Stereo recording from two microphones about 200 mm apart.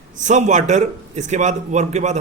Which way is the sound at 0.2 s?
35° right (ahead or behind).